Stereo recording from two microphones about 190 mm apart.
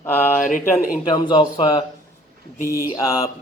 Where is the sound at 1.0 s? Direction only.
25° left (ahead or behind).